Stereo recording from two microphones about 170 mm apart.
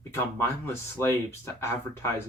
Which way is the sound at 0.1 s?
15° left (ahead or behind).